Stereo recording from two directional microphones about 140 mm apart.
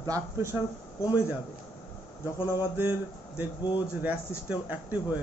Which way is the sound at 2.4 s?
15° right (ahead or behind).